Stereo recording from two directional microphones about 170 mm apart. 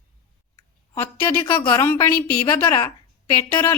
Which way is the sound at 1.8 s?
15° left (ahead or behind).